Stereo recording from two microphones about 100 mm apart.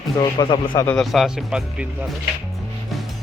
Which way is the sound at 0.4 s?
55° left (ahead or behind).